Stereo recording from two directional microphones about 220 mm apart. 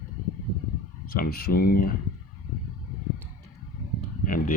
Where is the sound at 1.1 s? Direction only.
40° left (ahead or behind).